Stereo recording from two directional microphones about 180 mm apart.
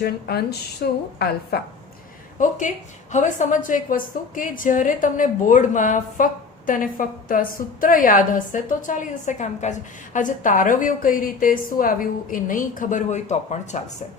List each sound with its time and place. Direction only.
0.0 s speech: 60° left (ahead or behind)
2.4 s a woman's voice: 45° left (ahead or behind)